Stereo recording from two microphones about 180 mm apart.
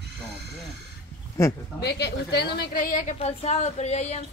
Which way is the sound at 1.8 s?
70° left (ahead or behind).